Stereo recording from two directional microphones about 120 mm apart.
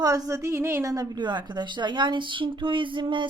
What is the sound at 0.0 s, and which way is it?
A woman's voice, 30° right (ahead or behind).